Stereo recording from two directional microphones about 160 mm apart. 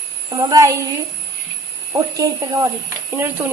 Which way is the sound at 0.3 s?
25° right (ahead or behind).